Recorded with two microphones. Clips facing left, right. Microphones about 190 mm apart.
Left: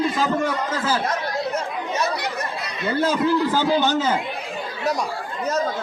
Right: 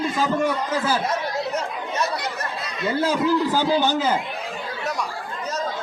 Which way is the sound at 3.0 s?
10° right (ahead or behind).